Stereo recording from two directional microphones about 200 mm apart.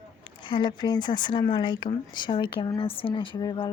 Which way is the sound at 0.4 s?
25° left (ahead or behind).